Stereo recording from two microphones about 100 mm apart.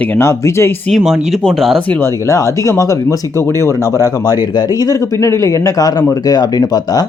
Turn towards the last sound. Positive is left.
turn(degrees=40)  # may be behind; listen again after turning